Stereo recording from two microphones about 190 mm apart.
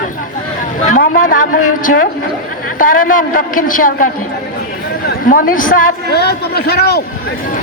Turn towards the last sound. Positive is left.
turn(degrees=60)  # may be behind; listen again after turning